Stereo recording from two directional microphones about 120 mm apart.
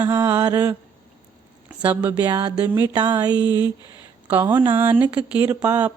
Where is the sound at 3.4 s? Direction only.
35° left (ahead or behind).